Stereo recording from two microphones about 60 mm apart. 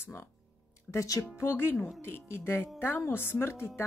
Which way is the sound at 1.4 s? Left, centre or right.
Left.